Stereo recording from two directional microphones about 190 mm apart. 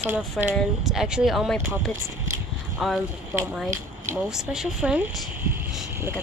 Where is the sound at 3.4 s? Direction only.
10° right (ahead or behind).